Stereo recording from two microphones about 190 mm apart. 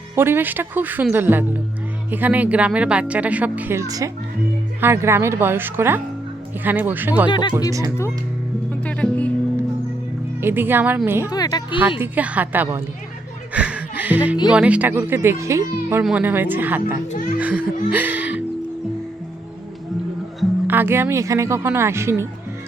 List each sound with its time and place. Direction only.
0.2 s speech: 10° right (ahead or behind)
7.3 s speech: 25° left (ahead or behind)
7.7 s speech: 15° right (ahead or behind)
8.7 s music: 5° left (ahead or behind)
10.4 s speech: 10° right (ahead or behind)
11.3 s speech: 20° left (ahead or behind)
11.9 s speech: 10° right (ahead or behind)
13.5 s music: 5° right (ahead or behind)
14.5 s speech: 5° right (ahead or behind)
16.8 s a child's voice: 45° left (ahead or behind)
17.9 s music: 10° right (ahead or behind)
20.7 s speech: 10° right (ahead or behind)